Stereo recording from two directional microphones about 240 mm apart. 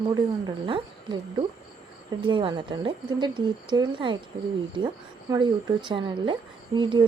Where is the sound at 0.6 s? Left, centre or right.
Right.